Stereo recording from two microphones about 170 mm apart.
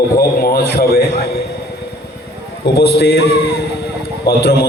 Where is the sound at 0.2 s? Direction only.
60° left (ahead or behind).